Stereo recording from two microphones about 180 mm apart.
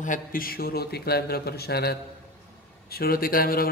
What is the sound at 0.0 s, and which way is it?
A man's voice, 50° left (ahead or behind).